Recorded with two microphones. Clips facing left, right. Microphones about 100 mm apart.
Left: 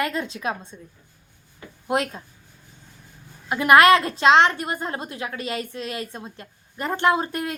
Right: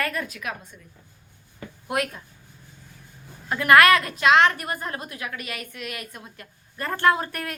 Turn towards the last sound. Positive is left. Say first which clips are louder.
# left 1 dB
turn(degrees=20)  # may be behind; listen again after turning